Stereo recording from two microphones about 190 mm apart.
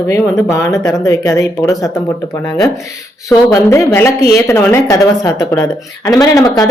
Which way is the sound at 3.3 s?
15° left (ahead or behind).